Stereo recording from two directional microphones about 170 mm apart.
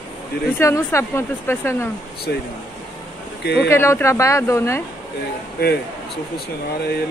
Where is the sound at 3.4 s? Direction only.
75° left (ahead or behind).